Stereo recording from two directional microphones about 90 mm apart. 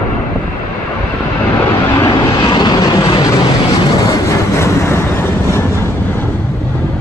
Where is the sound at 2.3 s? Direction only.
50° left (ahead or behind); by 6.3 s 25° left (ahead or behind).